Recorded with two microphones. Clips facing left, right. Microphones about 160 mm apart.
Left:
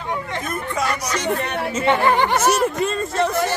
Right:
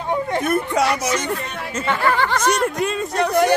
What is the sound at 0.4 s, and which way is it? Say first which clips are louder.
Speech: right 7 dB; 75° right (ahead or behind).